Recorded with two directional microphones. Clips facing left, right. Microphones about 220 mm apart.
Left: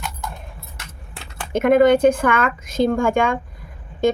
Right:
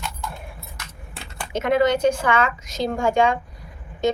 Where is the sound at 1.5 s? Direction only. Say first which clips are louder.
Left 6 dB; 55° left (ahead or behind).